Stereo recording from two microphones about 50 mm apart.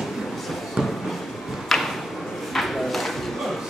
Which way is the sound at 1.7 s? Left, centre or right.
Centre.